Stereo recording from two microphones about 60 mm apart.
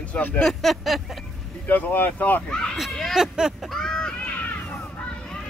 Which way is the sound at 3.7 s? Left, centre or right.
Centre.